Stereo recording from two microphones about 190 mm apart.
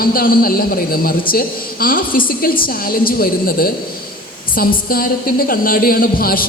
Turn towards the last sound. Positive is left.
turn(degrees=50)  # may be behind; listen again after turning